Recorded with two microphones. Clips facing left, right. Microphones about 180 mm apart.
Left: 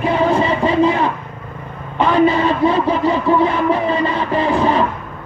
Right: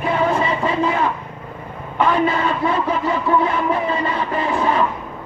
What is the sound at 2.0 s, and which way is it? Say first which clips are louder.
A man's voice: left 4 dB; 25° left (ahead or behind).